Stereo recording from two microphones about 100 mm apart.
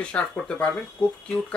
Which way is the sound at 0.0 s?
10° left (ahead or behind).